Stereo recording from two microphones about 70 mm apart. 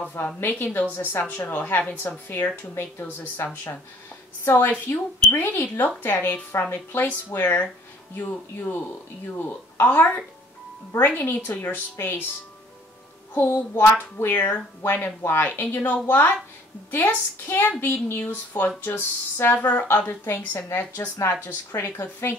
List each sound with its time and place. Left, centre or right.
0.0 s speech: left
13.3 s speech: left